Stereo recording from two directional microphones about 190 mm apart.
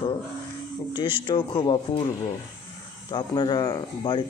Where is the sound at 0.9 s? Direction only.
25° left (ahead or behind).